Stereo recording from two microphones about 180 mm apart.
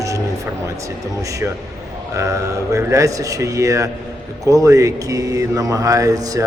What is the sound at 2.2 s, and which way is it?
Speech, 15° right (ahead or behind).